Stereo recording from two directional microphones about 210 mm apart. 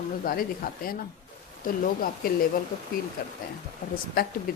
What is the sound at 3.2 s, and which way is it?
Speech, 45° left (ahead or behind).